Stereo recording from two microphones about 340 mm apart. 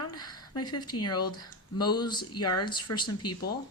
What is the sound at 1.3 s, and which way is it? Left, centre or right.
Speech, centre.